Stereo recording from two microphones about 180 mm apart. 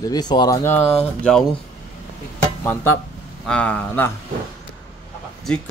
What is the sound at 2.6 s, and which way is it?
Speech, 10° left (ahead or behind).